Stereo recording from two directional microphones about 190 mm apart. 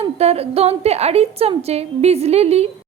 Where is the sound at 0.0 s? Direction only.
30° right (ahead or behind).